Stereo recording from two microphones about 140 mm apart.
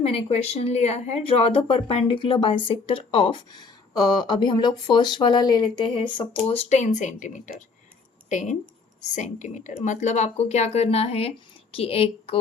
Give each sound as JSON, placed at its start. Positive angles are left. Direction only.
{"t": 0.0, "sound": "speech", "side_deg": 45}